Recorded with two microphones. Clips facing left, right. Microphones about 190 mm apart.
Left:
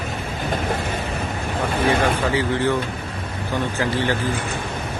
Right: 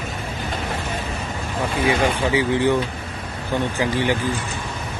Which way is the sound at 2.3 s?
15° right (ahead or behind).